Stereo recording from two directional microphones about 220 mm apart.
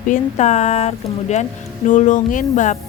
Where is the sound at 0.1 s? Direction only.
30° left (ahead or behind).